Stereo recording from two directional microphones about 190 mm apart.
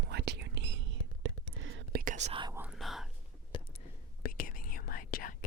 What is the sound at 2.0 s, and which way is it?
Whispering, 40° right (ahead or behind).